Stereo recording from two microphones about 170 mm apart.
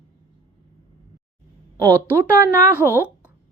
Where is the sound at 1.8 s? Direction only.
20° right (ahead or behind).